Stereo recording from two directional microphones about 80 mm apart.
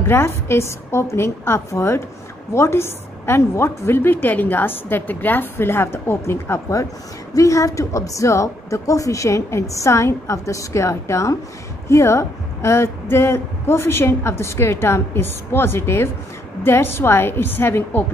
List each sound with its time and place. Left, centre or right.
0.0 s a woman's voice: left